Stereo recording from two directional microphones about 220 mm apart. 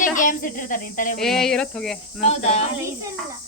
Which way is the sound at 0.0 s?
35° left (ahead or behind).